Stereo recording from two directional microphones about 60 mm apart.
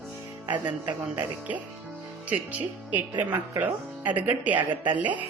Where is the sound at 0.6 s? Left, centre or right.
Right.